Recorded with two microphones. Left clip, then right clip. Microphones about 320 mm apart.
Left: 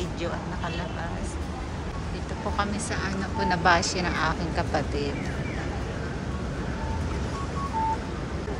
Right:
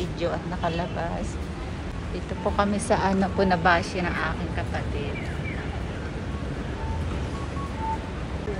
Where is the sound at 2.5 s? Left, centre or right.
Centre.